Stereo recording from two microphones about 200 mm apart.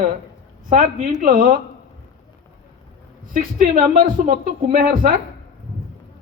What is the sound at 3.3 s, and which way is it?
Speech, 45° right (ahead or behind).